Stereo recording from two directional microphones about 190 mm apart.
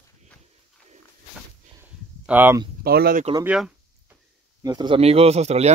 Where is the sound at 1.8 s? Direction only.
10° right (ahead or behind).